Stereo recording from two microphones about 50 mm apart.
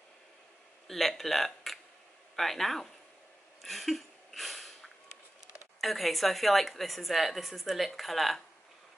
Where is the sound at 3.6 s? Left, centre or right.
Centre.